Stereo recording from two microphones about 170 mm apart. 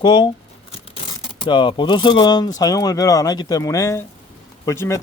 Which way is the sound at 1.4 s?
25° left (ahead or behind).